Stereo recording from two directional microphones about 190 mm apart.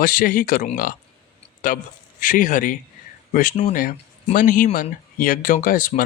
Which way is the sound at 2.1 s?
45° left (ahead or behind).